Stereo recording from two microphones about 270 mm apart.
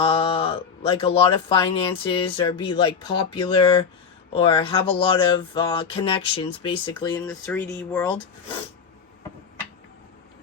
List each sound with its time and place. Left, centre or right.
0.0 s speech: centre
7.2 s speech: centre